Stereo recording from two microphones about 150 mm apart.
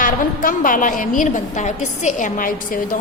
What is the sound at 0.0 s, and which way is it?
A woman's voice, 65° left (ahead or behind).